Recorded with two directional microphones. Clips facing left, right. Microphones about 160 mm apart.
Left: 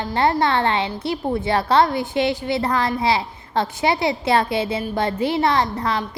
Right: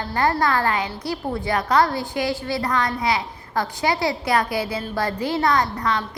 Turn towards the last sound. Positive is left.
turn(degrees=30)  # may be behind; listen again after turning